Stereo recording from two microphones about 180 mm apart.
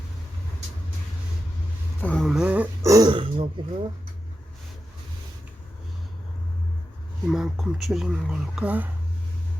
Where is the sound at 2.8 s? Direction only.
20° right (ahead or behind).